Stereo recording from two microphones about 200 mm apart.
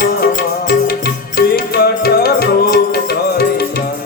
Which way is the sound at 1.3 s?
50° left (ahead or behind).